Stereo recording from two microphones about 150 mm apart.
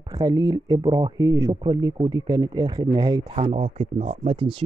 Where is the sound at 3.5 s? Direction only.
40° right (ahead or behind).